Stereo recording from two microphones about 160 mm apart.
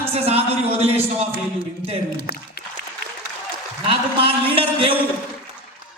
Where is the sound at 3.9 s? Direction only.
35° right (ahead or behind).